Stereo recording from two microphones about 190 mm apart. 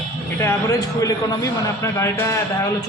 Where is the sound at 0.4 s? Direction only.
15° left (ahead or behind).